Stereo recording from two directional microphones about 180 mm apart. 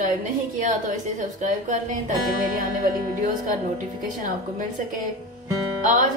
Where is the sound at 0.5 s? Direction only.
45° right (ahead or behind).